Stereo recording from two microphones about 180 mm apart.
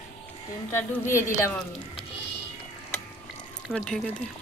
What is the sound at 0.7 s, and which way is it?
Speech, 15° left (ahead or behind).